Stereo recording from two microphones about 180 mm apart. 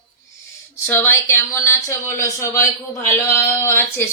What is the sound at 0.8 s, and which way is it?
Speech, 10° left (ahead or behind).